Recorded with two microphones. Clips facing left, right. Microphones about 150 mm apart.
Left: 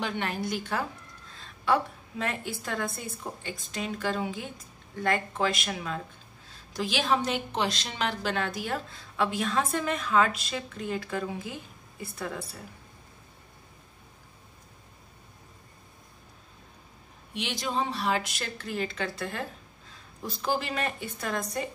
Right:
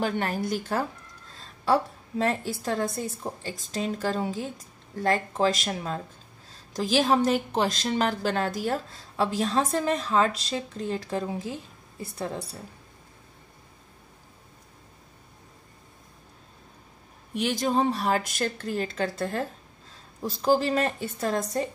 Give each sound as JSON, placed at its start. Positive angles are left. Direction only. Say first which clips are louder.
{"t": 0.0, "sound": "a woman's voice", "louder": "right 4 dB", "side_deg": -40}
{"t": 17.3, "sound": "a woman's voice", "louder": "right 7 dB", "side_deg": -45}